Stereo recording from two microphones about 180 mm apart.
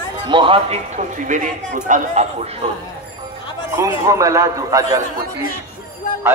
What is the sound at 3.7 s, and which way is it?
A man's voice, 20° right (ahead or behind).